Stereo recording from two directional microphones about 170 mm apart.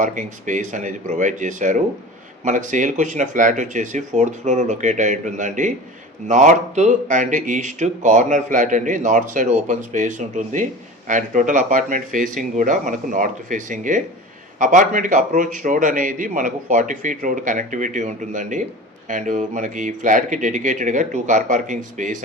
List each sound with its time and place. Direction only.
0.0 s a man's voice: 50° right (ahead or behind)